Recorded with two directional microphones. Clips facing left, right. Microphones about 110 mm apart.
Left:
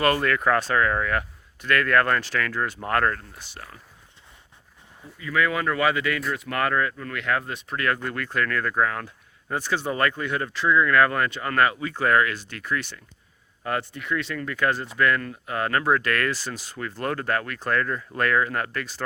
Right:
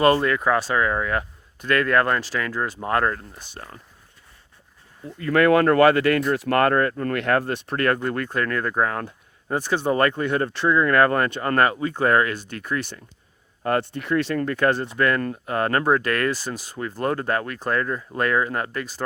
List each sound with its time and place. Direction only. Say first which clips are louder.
0.0 s speech: right 3 dB; 20° right (ahead or behind)
3.5 s speech: right 3 dB; 40° right (ahead or behind)
5.1 s speech: right 8 dB; 55° right (ahead or behind)
8.0 s speech: right 3 dB; 35° right (ahead or behind)
9.0 s speech: right 4 dB; 20° right (ahead or behind)
9.9 s speech: right 6 dB; 35° right (ahead or behind)
13.6 s speech: right 5 dB; 45° right (ahead or behind)
16.3 s speech: right 3 dB; 15° right (ahead or behind)
17.0 s speech: right 3 dB; 25° right (ahead or behind)